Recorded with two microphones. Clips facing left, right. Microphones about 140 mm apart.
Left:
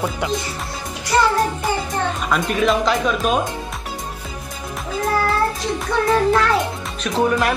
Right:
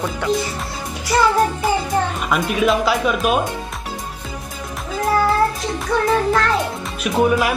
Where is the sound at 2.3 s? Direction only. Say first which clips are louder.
Even; 5° right (ahead or behind).